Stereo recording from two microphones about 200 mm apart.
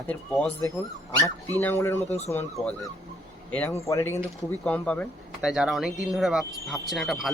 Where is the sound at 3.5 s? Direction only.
5° left (ahead or behind).